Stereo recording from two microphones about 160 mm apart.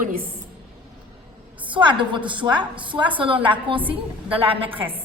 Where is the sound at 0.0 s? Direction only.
65° right (ahead or behind).